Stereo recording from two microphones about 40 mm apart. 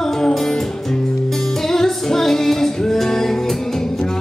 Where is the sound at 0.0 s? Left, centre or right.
Centre.